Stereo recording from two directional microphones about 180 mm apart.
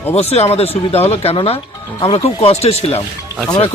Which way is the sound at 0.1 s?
35° left (ahead or behind).